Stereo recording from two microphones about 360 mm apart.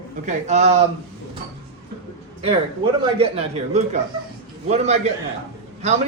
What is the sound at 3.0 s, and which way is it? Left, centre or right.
A man's voice, centre.